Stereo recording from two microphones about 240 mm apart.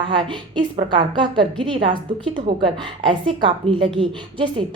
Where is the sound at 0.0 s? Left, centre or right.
Right.